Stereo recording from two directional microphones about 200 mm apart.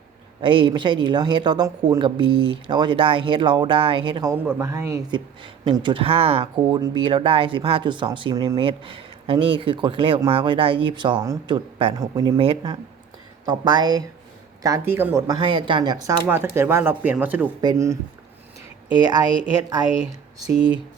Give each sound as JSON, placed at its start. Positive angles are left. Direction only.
{"t": 0.4, "sound": "speech", "side_deg": -25}
{"t": 18.9, "sound": "speech", "side_deg": -20}